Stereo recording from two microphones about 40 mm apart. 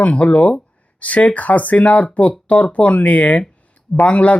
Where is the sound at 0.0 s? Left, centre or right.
Left.